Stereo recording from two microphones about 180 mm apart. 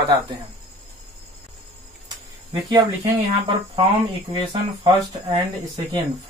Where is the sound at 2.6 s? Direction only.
20° right (ahead or behind).